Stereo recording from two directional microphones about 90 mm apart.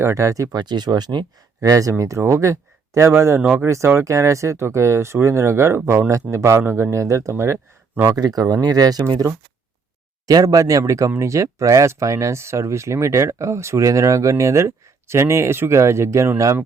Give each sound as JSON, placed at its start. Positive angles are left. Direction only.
{"t": 0.0, "sound": "speech", "side_deg": -35}
{"t": 0.6, "sound": "speech", "side_deg": -50}
{"t": 1.6, "sound": "speech", "side_deg": -40}
{"t": 8.0, "sound": "speech", "side_deg": -45}
{"t": 10.2, "sound": "speech", "side_deg": -40}